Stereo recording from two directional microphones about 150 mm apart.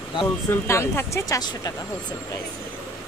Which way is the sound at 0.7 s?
15° left (ahead or behind).